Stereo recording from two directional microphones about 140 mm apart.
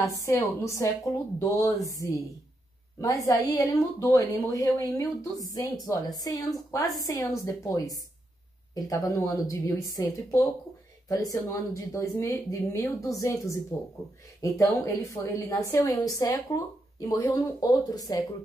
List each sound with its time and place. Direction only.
0.0 s a woman's voice: 20° left (ahead or behind)